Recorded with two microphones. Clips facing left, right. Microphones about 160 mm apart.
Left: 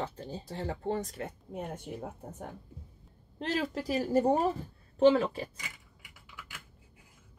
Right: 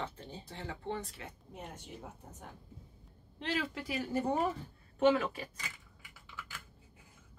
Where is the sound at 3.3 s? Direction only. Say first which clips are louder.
Left 4 dB; 40° left (ahead or behind).